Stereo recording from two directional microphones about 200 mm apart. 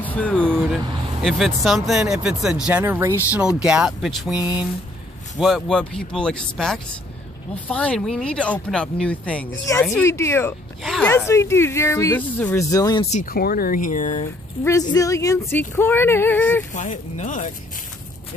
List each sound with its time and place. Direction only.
0.0 s vehicle: 5° left (ahead or behind)
0.6 s speech: 10° right (ahead or behind)
1.2 s speech: centre (ahead or behind)
10.8 s speech: centre (ahead or behind); by 13.0 s 15° left (ahead or behind)
13.1 s speech: 45° left (ahead or behind)
14.6 s speech: 15° left (ahead or behind)
16.7 s speech: 40° left (ahead or behind)